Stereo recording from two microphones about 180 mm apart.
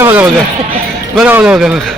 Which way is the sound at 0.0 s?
10° right (ahead or behind).